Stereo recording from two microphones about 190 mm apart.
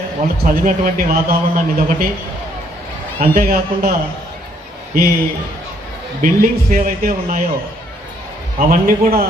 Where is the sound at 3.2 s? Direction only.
50° right (ahead or behind).